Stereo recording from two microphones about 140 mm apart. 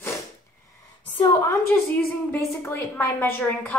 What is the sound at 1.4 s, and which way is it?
A woman's voice, 20° left (ahead or behind).